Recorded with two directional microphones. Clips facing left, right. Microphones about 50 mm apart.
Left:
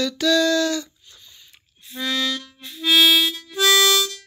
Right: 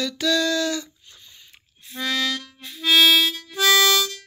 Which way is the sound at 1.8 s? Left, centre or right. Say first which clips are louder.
Even; right.